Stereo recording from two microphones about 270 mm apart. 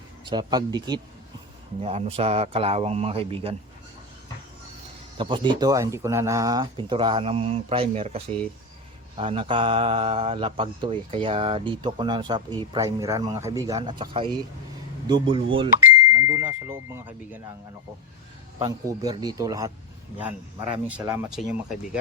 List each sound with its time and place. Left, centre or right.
0.3 s speech: centre
5.1 s speech: centre
16.1 s speech: centre
18.6 s speech: centre